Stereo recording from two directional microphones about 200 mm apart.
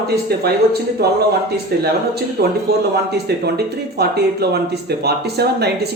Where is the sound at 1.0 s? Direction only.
50° right (ahead or behind).